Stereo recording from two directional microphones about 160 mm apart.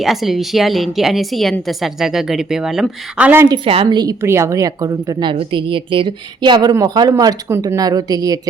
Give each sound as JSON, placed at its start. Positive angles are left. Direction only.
{"t": 0.0, "sound": "a woman's voice", "side_deg": 0}
{"t": 3.5, "sound": "a woman's voice", "side_deg": -35}